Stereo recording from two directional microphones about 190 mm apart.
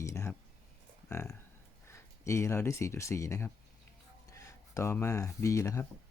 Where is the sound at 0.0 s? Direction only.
15° left (ahead or behind).